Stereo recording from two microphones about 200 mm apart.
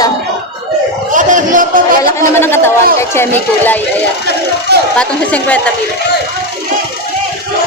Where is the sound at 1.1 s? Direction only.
40° right (ahead or behind).